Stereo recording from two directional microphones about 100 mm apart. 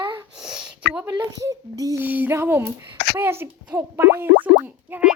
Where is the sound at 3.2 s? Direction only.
20° right (ahead or behind).